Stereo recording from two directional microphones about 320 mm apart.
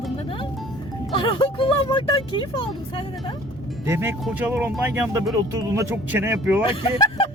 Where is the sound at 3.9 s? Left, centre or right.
Centre.